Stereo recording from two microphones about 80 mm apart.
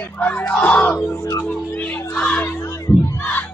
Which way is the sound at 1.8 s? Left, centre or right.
Centre.